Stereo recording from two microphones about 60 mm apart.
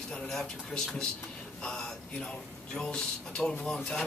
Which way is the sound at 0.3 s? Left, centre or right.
Centre.